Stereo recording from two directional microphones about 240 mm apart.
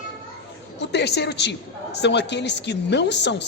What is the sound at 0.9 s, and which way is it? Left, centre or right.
A woman's voice, left.